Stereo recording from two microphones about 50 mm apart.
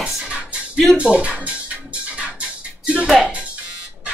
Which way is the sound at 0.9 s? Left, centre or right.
Right.